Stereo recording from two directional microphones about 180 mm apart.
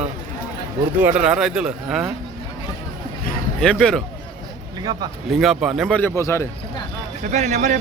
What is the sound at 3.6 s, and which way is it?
Speech, 5° left (ahead or behind).